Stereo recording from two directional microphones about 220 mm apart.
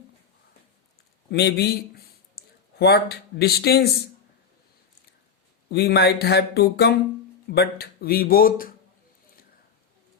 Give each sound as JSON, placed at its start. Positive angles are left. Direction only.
{"t": 1.3, "sound": "speech", "side_deg": 50}
{"t": 5.6, "sound": "speech", "side_deg": 45}